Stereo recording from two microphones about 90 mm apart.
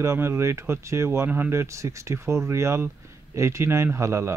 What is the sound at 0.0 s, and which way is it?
Speech, 30° right (ahead or behind).